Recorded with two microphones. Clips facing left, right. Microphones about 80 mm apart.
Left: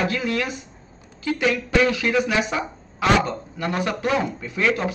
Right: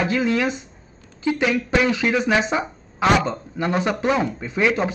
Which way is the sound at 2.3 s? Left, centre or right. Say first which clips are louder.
Right 3 dB; right.